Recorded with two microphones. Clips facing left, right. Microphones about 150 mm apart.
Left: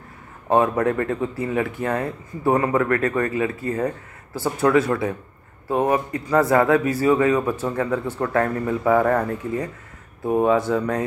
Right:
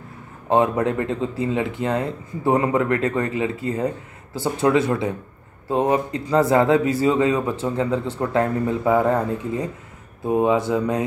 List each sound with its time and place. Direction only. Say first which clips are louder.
0.5 s speech: even; 20° right (ahead or behind)